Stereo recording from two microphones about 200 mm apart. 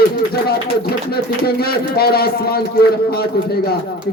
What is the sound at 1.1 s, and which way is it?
A man's voice, 50° left (ahead or behind).